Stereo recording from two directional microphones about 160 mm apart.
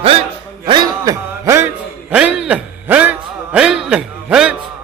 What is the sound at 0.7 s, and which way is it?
Music, 25° right (ahead or behind).